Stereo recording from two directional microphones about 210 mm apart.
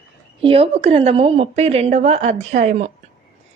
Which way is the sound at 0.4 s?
25° right (ahead or behind).